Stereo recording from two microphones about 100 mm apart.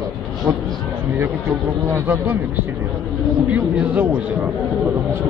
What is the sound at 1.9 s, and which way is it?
Speech, 25° right (ahead or behind).